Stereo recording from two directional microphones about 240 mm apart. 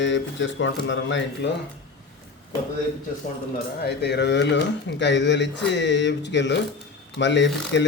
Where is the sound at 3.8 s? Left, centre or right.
Left.